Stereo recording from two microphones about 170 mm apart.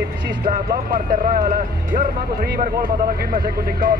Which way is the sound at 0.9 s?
55° right (ahead or behind).